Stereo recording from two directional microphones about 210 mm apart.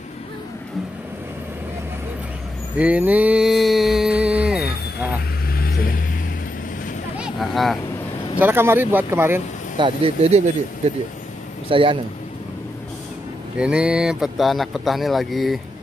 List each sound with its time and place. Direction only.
2.8 s a sound: 5° right (ahead or behind)
5.5 s vehicle: 45° left (ahead or behind)
7.2 s a sound: centre (ahead or behind)
8.4 s speech: 10° right (ahead or behind)
9.8 s speech: 25° right (ahead or behind)
13.6 s speech: 5° right (ahead or behind)